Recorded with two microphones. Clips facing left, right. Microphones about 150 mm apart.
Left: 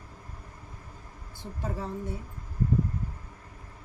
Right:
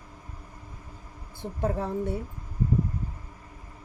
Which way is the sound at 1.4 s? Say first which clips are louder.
Right 7 dB; 60° right (ahead or behind).